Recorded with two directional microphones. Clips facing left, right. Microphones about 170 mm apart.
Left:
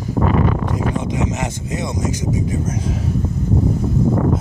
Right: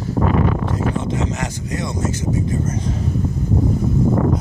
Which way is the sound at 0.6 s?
15° left (ahead or behind).